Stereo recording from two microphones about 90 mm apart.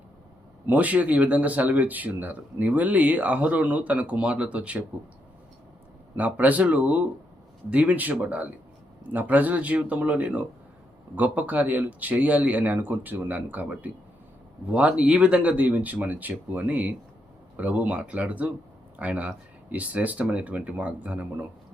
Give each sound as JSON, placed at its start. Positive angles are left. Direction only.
{"t": 0.7, "sound": "speech", "side_deg": -15}
{"t": 6.1, "sound": "speech", "side_deg": -15}